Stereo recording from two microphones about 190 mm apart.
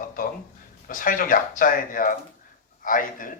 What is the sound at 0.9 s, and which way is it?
Speech, 45° left (ahead or behind).